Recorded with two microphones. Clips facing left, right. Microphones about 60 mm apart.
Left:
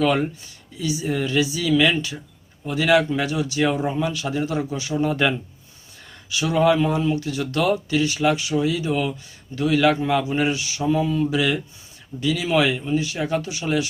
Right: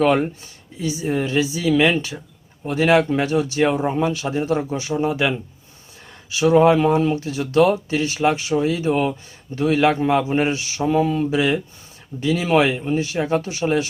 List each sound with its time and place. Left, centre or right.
0.0 s speech: right
5.0 s speech: centre
6.3 s speech: right